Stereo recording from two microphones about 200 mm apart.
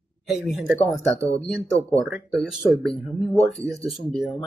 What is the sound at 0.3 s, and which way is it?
Speech, centre (ahead or behind).